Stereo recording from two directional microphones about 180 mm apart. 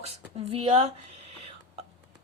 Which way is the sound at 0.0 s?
30° right (ahead or behind).